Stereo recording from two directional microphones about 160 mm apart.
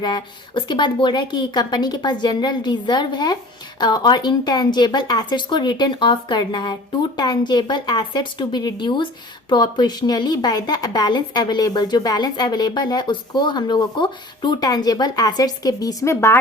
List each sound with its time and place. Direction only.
0.0 s a woman's voice: 25° left (ahead or behind)